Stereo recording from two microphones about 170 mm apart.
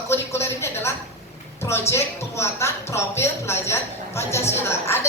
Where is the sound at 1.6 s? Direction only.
15° left (ahead or behind).